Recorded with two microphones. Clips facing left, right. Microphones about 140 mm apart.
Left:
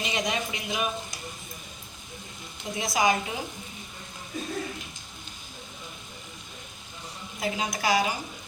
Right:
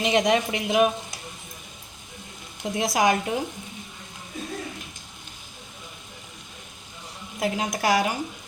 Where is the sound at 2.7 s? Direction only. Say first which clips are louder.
Right 3 dB; 80° right; by 3.4 s 65° right (ahead or behind).